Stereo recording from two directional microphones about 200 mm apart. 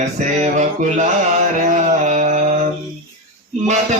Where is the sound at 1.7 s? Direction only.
35° right (ahead or behind).